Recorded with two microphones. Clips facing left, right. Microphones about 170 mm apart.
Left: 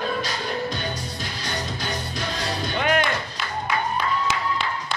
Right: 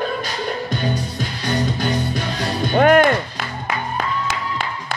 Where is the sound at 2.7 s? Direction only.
50° right (ahead or behind).